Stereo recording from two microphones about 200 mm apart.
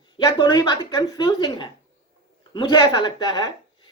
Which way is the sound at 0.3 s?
20° left (ahead or behind).